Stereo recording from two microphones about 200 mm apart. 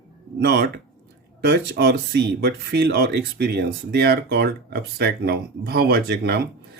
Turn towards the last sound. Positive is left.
turn(degrees=-55)  # may be behind; listen again after turning